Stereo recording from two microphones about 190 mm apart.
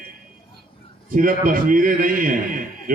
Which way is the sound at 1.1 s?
45° right (ahead or behind).